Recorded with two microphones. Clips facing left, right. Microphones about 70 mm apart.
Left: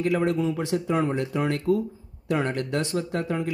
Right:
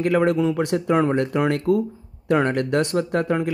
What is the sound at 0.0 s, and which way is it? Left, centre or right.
Speech, right.